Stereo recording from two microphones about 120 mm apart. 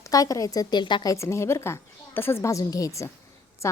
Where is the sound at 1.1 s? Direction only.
25° left (ahead or behind).